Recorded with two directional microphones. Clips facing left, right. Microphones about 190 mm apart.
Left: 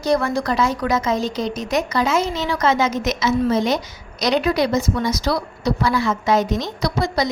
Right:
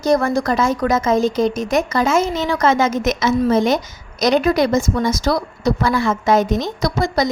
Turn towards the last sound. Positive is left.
turn(degrees=-45)  # may be behind; listen again after turning